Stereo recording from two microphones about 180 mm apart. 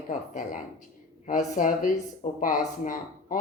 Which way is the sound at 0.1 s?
45° left (ahead or behind).